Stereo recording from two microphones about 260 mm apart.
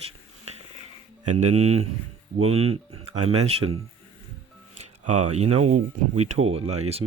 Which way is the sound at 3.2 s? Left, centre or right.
Right.